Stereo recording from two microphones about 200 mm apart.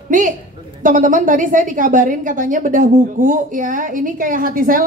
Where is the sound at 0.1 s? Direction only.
40° right (ahead or behind).